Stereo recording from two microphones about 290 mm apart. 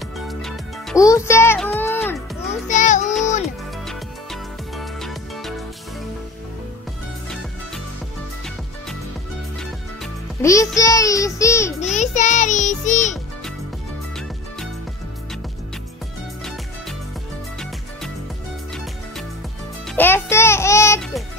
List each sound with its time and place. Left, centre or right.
0.3 s music: centre
2.7 s music: left
3.8 s music: centre
10.4 s music: centre
10.8 s child singing: centre
11.8 s child singing: left
20.0 s music: centre